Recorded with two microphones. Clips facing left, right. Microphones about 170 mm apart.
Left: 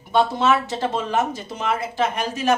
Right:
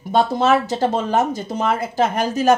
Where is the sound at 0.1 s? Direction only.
40° right (ahead or behind).